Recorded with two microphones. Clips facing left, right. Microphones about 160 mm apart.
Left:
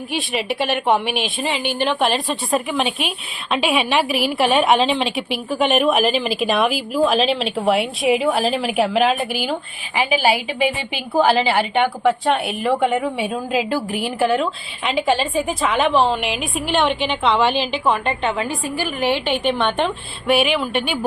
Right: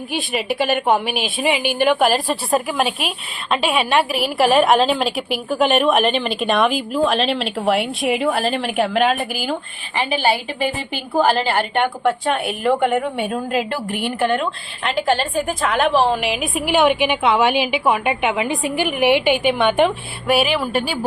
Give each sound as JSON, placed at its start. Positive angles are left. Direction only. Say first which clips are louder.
{"t": 0.1, "sound": "a woman's voice", "louder": "right 1 dB", "side_deg": 0}